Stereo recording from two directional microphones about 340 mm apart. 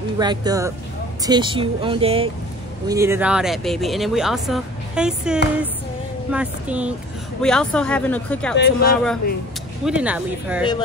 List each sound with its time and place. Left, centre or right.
0.2 s speech: centre
8.5 s speech: left
9.8 s speech: centre